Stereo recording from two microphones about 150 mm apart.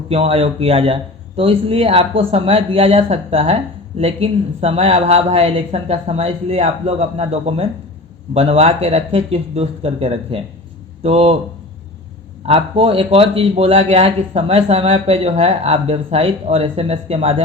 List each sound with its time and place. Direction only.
0.1 s speech: 40° right (ahead or behind)
12.5 s speech: 40° right (ahead or behind)